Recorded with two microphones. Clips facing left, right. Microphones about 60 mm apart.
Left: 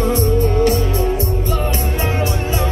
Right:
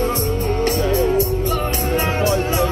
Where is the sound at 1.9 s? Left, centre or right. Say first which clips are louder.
Right 1 dB; right.